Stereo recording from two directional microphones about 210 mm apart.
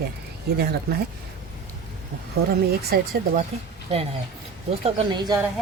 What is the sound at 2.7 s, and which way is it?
Speech, 45° right (ahead or behind).